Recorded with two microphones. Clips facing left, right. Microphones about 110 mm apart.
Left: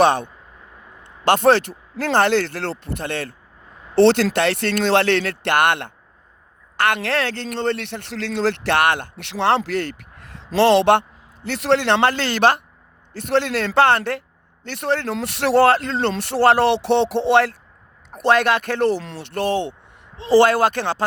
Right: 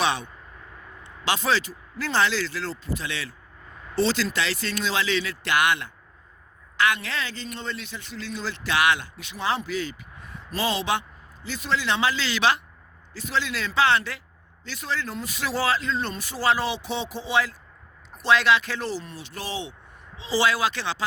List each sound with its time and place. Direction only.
0.0 s speech: 50° left (ahead or behind)
3.9 s a man's voice: 65° left (ahead or behind)